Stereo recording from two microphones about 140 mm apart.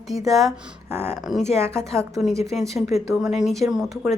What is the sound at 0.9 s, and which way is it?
Speech, 15° right (ahead or behind).